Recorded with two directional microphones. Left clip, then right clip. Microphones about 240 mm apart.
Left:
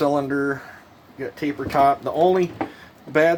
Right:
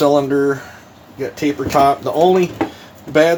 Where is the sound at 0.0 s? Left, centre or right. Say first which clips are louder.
Right 7 dB; left.